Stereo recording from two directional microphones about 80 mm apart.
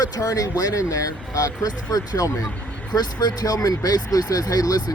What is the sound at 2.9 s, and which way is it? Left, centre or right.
Speech, left.